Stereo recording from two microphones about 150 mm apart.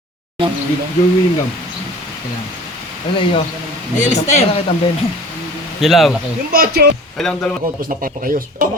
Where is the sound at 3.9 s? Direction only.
50° left (ahead or behind).